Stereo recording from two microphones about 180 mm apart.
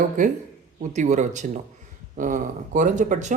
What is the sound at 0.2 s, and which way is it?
Speech, 45° right (ahead or behind).